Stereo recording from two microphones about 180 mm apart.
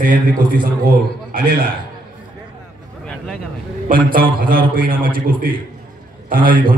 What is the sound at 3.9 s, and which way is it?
A man's voice, 50° right (ahead or behind).